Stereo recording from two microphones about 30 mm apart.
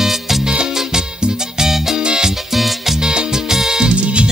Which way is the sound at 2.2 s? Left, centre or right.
Centre.